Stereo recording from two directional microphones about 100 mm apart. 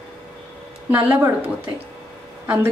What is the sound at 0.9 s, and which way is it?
Speech, 20° right (ahead or behind).